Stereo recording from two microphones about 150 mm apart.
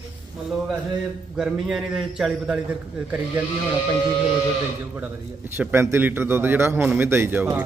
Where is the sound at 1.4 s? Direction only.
5° right (ahead or behind).